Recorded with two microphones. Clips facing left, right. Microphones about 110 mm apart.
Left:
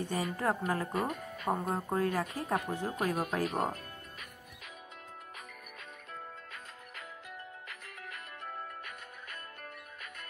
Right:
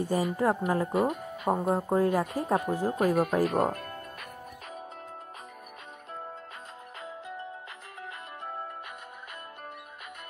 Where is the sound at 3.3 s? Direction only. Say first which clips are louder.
Right 7 dB; 50° right (ahead or behind).